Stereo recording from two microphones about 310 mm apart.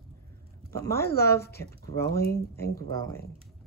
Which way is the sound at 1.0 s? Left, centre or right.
Left.